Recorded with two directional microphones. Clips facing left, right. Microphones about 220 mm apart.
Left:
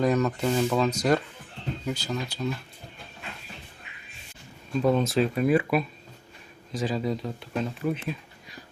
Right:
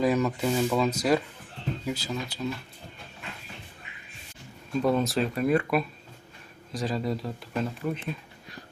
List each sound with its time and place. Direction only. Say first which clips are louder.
0.0 s speech: left 1 dB; 5° right (ahead or behind)
4.7 s speech: left 1 dB; centre (ahead or behind)